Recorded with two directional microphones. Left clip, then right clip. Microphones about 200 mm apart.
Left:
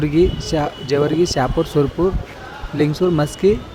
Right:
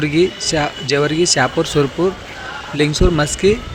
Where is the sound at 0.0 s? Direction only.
15° left (ahead or behind).